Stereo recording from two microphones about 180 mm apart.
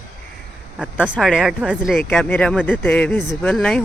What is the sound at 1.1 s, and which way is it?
Speech, centre (ahead or behind).